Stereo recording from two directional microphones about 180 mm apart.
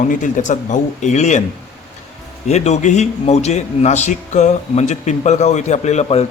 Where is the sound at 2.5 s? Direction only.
40° left (ahead or behind).